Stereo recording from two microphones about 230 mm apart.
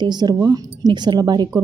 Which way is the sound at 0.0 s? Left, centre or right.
Centre.